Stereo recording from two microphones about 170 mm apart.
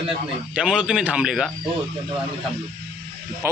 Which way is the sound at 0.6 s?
5° right (ahead or behind).